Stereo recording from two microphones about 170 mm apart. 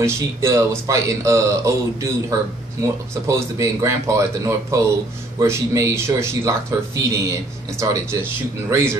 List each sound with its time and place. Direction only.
0.0 s speech: 15° right (ahead or behind)